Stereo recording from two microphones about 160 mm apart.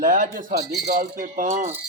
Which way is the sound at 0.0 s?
60° right (ahead or behind).